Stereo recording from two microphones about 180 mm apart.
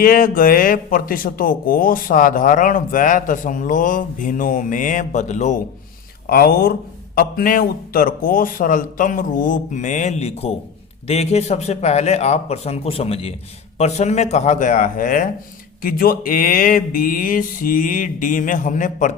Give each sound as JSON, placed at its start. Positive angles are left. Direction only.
{"t": 0.0, "sound": "speech", "side_deg": 50}
{"t": 6.2, "sound": "speech", "side_deg": 55}